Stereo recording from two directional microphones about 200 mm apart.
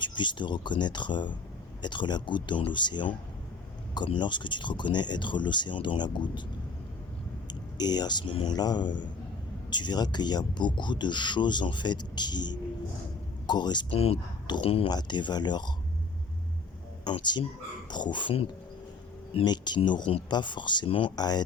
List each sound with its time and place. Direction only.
0.0 s speech: 25° left (ahead or behind)
7.4 s speech: 20° left (ahead or behind)
17.0 s speech: 20° left (ahead or behind)